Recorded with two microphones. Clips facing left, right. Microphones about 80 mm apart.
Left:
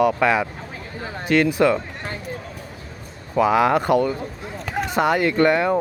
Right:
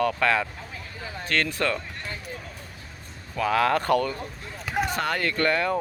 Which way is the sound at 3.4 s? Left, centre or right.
Centre.